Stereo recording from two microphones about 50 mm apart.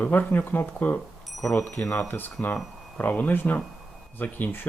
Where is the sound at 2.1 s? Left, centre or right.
Left.